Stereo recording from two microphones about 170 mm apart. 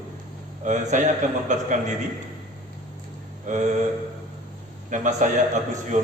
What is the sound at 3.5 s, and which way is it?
Speech, 45° right (ahead or behind).